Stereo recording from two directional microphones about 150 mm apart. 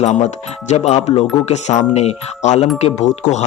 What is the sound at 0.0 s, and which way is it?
Speech, 50° left (ahead or behind).